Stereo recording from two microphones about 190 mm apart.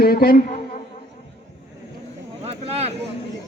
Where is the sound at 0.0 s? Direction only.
50° left (ahead or behind).